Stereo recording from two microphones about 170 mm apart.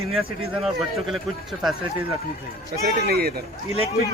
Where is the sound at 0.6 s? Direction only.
Centre (ahead or behind).